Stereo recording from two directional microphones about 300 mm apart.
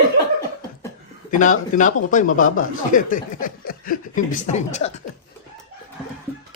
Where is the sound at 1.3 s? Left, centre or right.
Left.